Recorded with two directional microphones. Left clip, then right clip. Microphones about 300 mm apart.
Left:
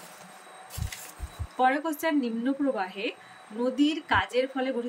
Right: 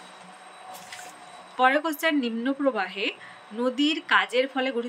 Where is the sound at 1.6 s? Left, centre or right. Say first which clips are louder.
Right 3 dB; centre.